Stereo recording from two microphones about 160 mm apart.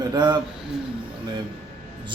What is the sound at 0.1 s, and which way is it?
Speech, 25° right (ahead or behind).